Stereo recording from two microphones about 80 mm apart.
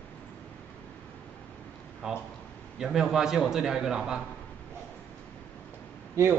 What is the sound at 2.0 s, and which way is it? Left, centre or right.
A man's voice, centre.